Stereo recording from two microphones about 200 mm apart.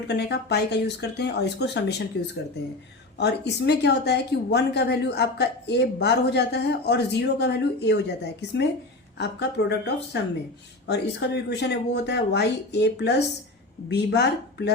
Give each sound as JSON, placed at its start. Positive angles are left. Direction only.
{"t": 0.1, "sound": "a woman's voice", "side_deg": 55}
{"t": 3.2, "sound": "a woman's voice", "side_deg": 55}